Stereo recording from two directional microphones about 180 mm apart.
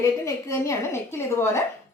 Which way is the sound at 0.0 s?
15° left (ahead or behind).